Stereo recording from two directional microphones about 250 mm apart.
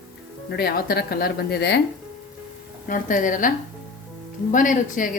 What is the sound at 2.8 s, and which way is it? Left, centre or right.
Speech, left.